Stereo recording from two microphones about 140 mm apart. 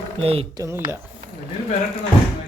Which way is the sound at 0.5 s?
20° right (ahead or behind).